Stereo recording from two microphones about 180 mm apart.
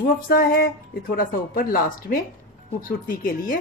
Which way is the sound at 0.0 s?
55° left (ahead or behind).